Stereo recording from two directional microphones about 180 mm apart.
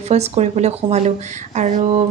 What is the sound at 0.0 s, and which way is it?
Speech, 35° right (ahead or behind).